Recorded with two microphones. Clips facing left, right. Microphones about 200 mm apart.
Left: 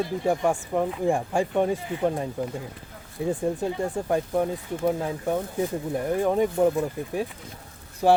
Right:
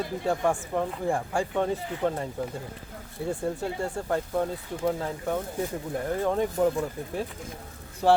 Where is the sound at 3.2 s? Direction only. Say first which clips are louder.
Left 4 dB; 15° left (ahead or behind).